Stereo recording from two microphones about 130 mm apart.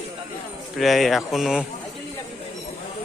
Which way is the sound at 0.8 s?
Centre (ahead or behind).